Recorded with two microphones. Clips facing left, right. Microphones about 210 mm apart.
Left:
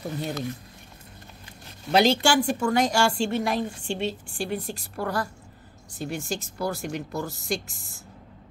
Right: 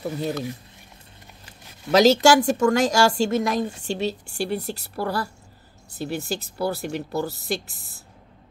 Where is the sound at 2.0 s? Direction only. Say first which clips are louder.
Right 5 dB; 40° right (ahead or behind).